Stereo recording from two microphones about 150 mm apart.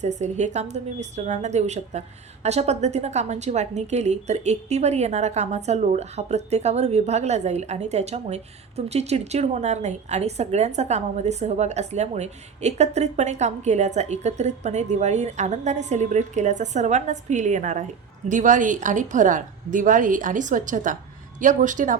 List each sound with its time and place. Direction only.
0.0 s a woman's voice: 50° right (ahead or behind)